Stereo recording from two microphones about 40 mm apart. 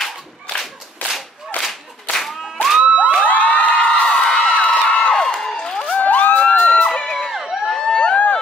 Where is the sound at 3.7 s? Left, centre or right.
Left.